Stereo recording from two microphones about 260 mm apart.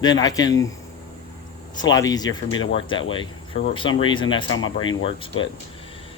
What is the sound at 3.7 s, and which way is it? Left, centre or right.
Speech, centre.